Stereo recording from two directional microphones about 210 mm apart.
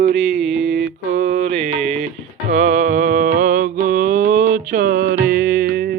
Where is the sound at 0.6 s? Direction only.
60° right (ahead or behind).